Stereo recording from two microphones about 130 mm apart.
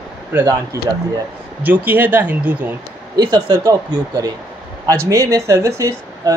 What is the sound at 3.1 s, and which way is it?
Speech, 35° right (ahead or behind).